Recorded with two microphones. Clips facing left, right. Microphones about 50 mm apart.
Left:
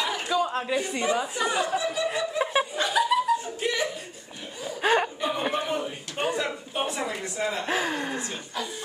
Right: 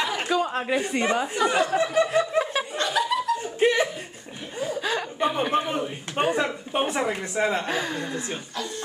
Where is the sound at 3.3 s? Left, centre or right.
Right.